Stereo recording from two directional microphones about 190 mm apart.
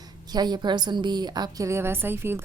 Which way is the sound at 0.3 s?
20° right (ahead or behind).